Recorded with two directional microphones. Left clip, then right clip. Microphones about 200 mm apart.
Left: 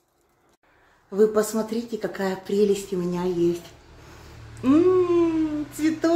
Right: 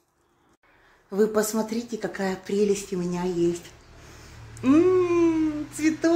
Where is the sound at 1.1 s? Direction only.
25° right (ahead or behind); by 3.3 s 10° right (ahead or behind).